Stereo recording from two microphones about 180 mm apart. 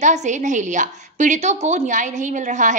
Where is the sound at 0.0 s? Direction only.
40° right (ahead or behind).